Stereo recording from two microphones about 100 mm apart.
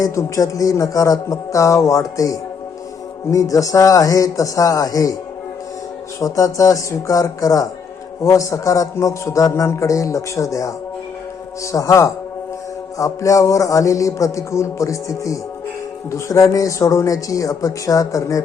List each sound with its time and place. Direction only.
0.0 s a man's voice: 35° left (ahead or behind)
6.1 s a man's voice: 35° left (ahead or behind)